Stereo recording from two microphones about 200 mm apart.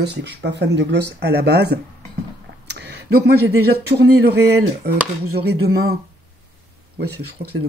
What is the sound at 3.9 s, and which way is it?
Speech, 55° right (ahead or behind).